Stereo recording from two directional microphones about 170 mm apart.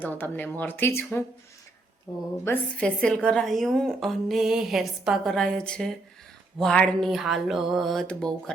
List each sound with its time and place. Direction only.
0.0 s speech: 10° left (ahead or behind)
2.4 s a woman's voice: 10° left (ahead or behind)